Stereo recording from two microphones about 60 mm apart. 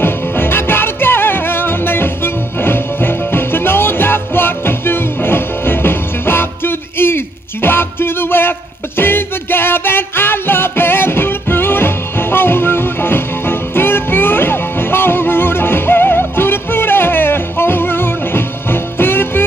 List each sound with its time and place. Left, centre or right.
0.0 s music: left